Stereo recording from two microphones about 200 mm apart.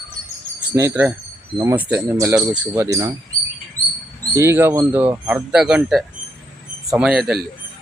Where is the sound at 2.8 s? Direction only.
15° right (ahead or behind).